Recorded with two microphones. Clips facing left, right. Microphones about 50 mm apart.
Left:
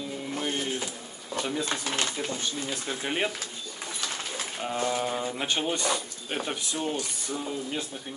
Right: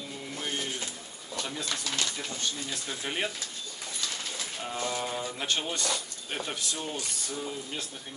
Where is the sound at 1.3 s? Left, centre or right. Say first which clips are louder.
Left 6 dB; centre.